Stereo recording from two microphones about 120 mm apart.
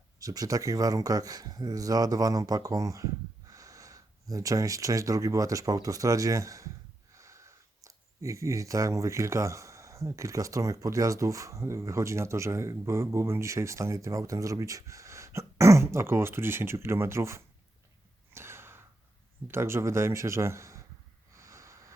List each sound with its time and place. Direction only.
0.2 s speech: 30° right (ahead or behind)
18.3 s gasp: 20° right (ahead or behind)
19.5 s speech: 20° right (ahead or behind)
21.3 s snort: 25° right (ahead or behind)